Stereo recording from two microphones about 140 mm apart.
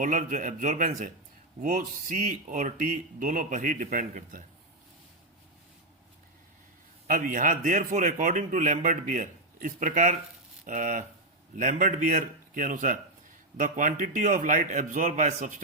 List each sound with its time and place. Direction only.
0.0 s a man's voice: 65° right (ahead or behind)
7.1 s a man's voice: 75° right (ahead or behind)